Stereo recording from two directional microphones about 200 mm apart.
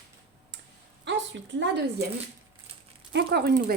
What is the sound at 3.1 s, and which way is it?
Speech, 55° right (ahead or behind).